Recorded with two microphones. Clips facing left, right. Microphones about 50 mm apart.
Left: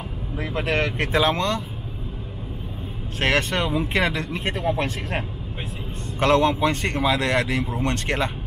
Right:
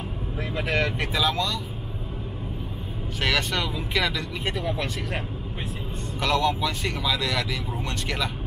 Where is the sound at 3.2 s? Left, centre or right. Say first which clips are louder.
Left 4 dB; left.